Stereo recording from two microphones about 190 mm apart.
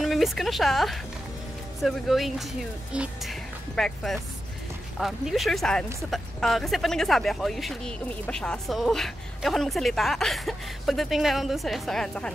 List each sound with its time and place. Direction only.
0.0 s a woman's voice: centre (ahead or behind)